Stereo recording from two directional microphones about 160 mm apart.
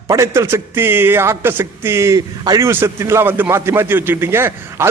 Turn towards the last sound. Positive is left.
turn(degrees=-15)  # may be behind; listen again after turning